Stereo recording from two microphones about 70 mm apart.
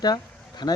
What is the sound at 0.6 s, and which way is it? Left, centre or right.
Speech, left.